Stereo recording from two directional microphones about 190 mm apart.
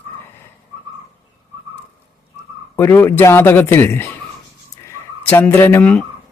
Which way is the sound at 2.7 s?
15° left (ahead or behind).